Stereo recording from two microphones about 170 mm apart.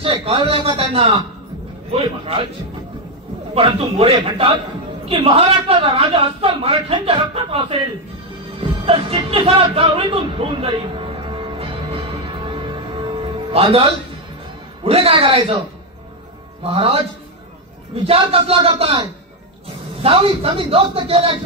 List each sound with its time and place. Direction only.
0.0 s a man's voice: 35° right (ahead or behind)
3.5 s a man's voice: 35° right (ahead or behind)
8.5 s music: 35° right (ahead or behind)
14.8 s a man's voice: 35° right (ahead or behind)
16.6 s a man's voice: 35° right (ahead or behind)